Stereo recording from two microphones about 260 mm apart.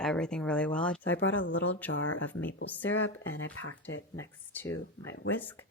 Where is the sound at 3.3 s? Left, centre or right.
Left.